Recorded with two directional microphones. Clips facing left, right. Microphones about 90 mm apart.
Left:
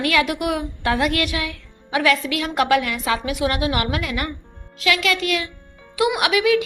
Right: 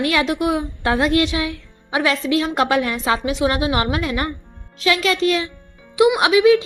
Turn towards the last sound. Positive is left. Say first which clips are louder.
# right 5 dB
turn(degrees=-25)  # may be behind; listen again after turning